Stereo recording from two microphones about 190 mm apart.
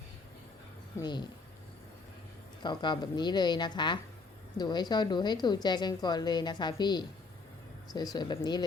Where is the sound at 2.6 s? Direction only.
25° left (ahead or behind).